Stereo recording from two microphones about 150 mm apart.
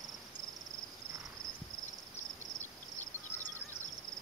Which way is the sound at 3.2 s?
15° left (ahead or behind).